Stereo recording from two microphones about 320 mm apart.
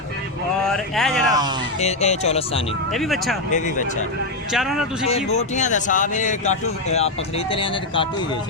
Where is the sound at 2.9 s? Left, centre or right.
Centre.